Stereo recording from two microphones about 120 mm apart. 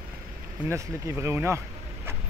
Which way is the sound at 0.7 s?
25° right (ahead or behind).